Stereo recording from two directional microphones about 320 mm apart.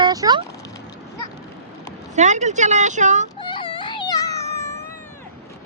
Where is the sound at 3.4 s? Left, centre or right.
Centre.